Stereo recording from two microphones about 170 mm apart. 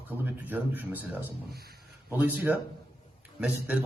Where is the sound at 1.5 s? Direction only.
65° right (ahead or behind).